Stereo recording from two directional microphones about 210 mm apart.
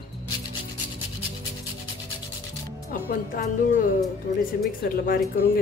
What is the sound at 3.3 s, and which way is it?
A woman's voice, 40° left (ahead or behind).